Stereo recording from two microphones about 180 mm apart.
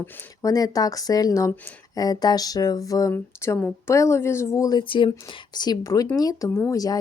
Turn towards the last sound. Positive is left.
turn(degrees=20)  # may be behind; listen again after turning